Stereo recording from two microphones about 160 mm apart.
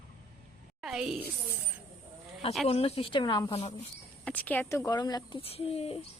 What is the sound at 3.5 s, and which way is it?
Speech, 40° left (ahead or behind).